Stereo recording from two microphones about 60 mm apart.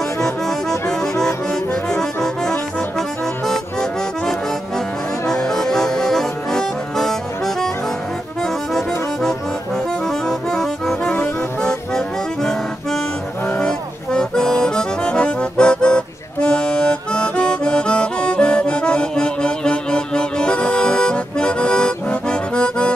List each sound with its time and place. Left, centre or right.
0.2 s accordion: centre
5.2 s accordion: centre
10.0 s accordion: centre
11.9 s music: centre
13.5 s accordion: centre